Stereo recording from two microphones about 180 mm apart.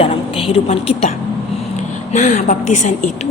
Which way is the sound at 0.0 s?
30° left (ahead or behind).